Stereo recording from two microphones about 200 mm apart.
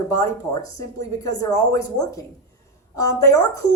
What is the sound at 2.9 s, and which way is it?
Speech, 15° left (ahead or behind).